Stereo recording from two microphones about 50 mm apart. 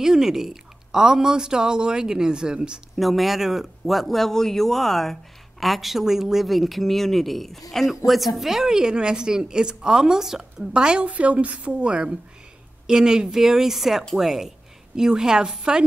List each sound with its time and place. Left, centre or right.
0.0 s speech: centre
3.0 s speech: centre
10.7 s a woman's voice: centre